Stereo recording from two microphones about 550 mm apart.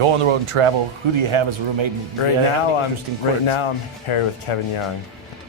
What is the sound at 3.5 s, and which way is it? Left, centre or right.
Speech, left.